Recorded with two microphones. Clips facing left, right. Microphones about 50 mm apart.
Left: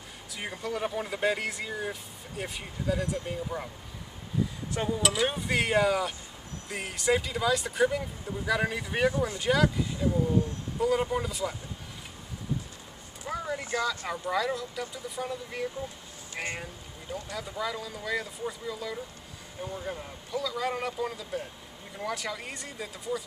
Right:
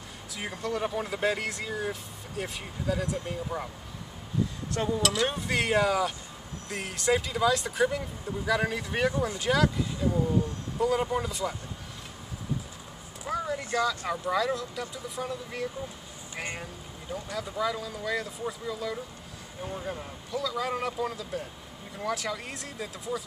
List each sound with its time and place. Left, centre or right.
0.4 s speech: centre
4.7 s speech: centre
13.3 s speech: centre
17.1 s speech: centre